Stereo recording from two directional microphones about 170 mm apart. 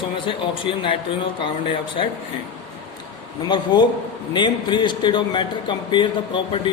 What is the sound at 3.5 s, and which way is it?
A man's voice, 25° left (ahead or behind).